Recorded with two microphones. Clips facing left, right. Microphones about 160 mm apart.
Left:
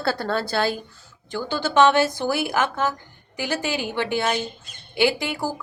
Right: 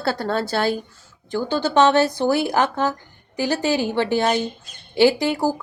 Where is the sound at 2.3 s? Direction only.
40° right (ahead or behind).